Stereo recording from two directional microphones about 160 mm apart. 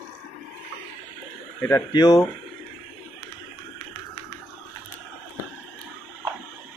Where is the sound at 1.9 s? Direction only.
25° left (ahead or behind).